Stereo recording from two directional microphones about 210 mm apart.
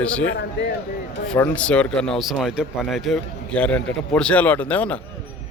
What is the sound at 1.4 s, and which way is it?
Speech, 5° left (ahead or behind).